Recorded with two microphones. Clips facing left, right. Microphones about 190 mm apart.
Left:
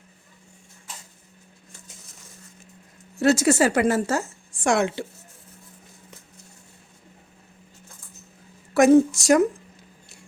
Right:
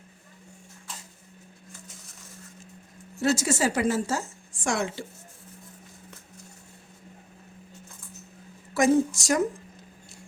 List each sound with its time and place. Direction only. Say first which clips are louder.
3.2 s a woman's voice: left 6 dB; 65° left (ahead or behind)
8.7 s a woman's voice: left 6 dB; 65° left (ahead or behind)